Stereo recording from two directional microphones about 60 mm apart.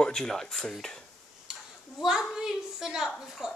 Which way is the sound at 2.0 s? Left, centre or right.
Centre.